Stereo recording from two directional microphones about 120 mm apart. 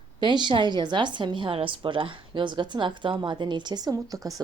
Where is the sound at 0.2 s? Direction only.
40° right (ahead or behind).